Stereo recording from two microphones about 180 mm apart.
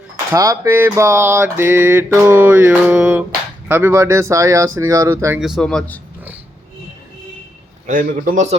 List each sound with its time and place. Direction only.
0.3 s a sound: 20° right (ahead or behind)
5.4 s speech: centre (ahead or behind)
7.9 s a man's voice: 50° right (ahead or behind)